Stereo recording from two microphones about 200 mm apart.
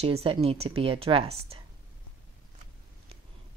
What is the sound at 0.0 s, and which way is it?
Speech, 30° right (ahead or behind).